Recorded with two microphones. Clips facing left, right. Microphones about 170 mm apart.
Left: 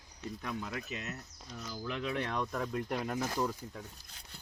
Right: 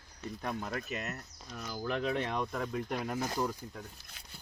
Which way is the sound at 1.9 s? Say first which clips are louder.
Right 4 dB; 40° right (ahead or behind).